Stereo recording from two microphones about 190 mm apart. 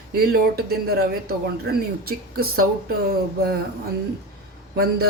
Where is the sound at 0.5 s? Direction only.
55° right (ahead or behind).